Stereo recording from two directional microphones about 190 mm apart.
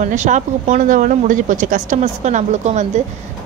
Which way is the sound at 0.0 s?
40° right (ahead or behind).